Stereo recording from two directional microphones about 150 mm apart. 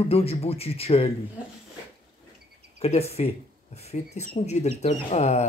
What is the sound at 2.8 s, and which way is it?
Speech, 45° left (ahead or behind).